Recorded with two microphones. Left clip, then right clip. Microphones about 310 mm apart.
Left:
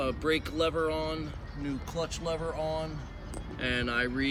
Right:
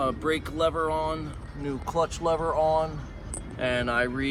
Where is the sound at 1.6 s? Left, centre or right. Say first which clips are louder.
Right 8 dB; centre.